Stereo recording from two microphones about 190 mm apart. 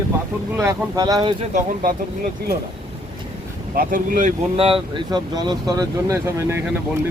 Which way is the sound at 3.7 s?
45° right (ahead or behind).